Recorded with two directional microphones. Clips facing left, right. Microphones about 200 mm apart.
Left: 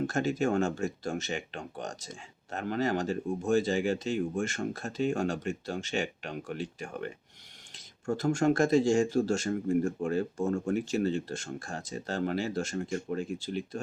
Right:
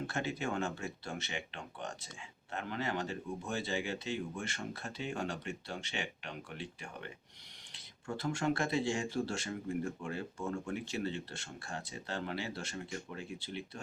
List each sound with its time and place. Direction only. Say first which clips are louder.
0.1 s speech: left 9 dB; 45° left (ahead or behind)